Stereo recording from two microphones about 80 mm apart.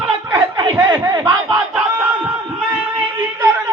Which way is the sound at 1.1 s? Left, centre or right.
Right.